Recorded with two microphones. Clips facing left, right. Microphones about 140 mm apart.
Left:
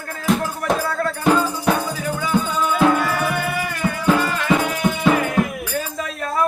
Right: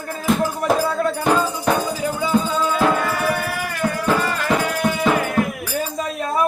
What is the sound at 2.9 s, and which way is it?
Music, centre (ahead or behind).